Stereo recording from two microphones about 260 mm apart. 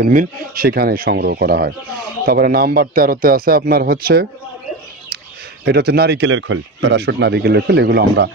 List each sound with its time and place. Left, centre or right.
0.0 s speech: right
5.7 s speech: right